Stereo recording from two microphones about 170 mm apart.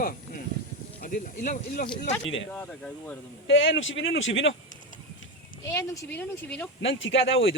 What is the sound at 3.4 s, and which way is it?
Speech, 90° left.